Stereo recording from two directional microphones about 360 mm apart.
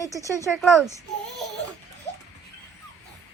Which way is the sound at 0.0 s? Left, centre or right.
Centre.